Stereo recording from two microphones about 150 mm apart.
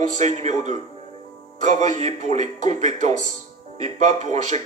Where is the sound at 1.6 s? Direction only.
50° right (ahead or behind).